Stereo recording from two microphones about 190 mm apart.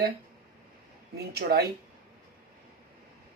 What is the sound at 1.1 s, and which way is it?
Speech, 55° right (ahead or behind).